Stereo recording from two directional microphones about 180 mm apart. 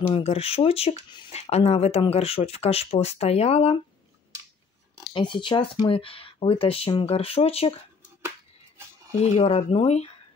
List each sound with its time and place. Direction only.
0.1 s speech: 35° left (ahead or behind)
5.1 s speech: 25° left (ahead or behind)
9.2 s speech: 35° left (ahead or behind)